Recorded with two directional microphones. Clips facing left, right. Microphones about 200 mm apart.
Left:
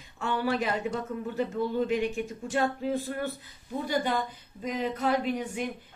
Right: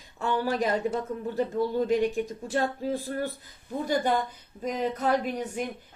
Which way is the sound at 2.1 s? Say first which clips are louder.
Right 2 dB; 40° right (ahead or behind).